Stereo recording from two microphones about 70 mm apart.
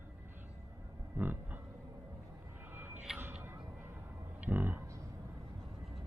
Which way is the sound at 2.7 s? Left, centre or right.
Right.